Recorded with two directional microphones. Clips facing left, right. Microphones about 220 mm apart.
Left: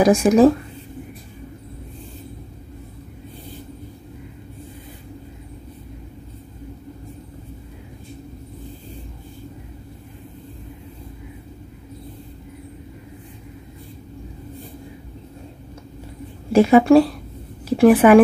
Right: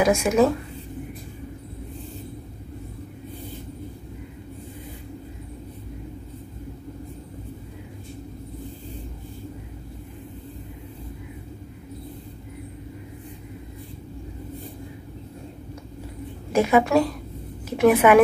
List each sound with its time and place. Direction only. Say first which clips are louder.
0.0 s speech: left 5 dB; 35° left (ahead or behind)
16.5 s a woman's voice: left 7 dB; 30° left (ahead or behind)